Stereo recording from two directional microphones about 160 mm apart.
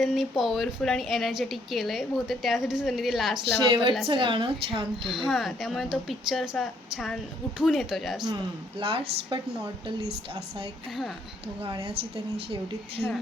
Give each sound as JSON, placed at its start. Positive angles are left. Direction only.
{"t": 0.0, "sound": "a woman's voice", "side_deg": 0}
{"t": 3.6, "sound": "a woman's voice", "side_deg": -30}
{"t": 5.0, "sound": "a woman's voice", "side_deg": 0}
{"t": 8.8, "sound": "a woman's voice", "side_deg": -35}